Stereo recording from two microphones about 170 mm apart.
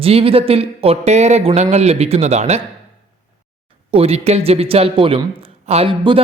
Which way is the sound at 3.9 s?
35° right (ahead or behind).